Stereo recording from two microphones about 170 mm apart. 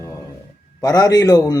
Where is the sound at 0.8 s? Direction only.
20° left (ahead or behind).